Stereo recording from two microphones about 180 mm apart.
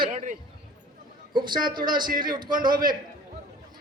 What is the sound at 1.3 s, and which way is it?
A man's voice, 25° right (ahead or behind).